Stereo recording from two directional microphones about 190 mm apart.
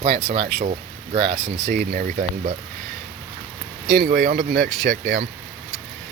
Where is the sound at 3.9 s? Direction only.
55° right (ahead or behind).